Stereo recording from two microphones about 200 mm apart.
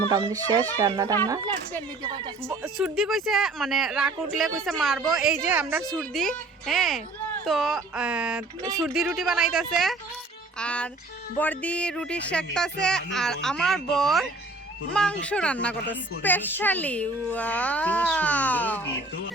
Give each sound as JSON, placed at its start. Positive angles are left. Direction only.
{"t": 0.1, "sound": "speech", "side_deg": -20}
{"t": 2.7, "sound": "a woman's voice", "side_deg": 0}
{"t": 5.9, "sound": "a woman's voice", "side_deg": 5}